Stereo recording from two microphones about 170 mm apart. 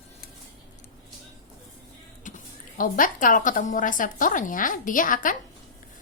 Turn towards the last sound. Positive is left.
turn(degrees=50)  # may be behind; listen again after turning